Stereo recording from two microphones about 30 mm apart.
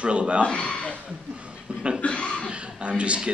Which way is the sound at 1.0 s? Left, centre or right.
Right.